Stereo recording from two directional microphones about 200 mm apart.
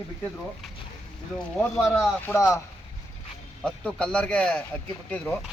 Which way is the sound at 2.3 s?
15° left (ahead or behind).